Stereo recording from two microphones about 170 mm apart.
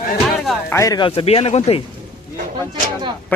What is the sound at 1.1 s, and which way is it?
Speech, 35° left (ahead or behind).